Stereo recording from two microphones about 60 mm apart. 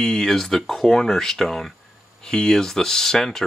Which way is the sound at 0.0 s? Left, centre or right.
Centre.